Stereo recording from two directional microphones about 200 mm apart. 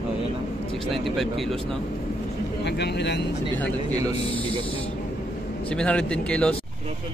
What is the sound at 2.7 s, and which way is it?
Speech, 60° left (ahead or behind).